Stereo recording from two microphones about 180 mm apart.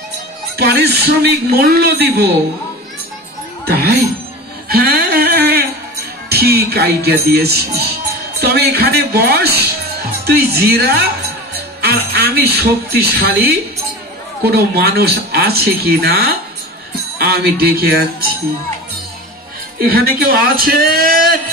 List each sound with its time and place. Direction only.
0.6 s speech: 60° right (ahead or behind)
3.6 s speech: 60° right (ahead or behind)
4.6 s a sound: 55° right (ahead or behind)
6.2 s speech: 60° right (ahead or behind)
19.9 s speech: 60° right (ahead or behind)